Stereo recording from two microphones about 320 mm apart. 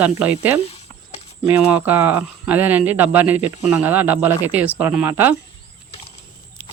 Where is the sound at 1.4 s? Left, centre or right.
Centre.